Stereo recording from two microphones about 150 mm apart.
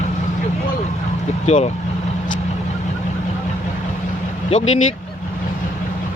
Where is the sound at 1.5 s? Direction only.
45° left (ahead or behind).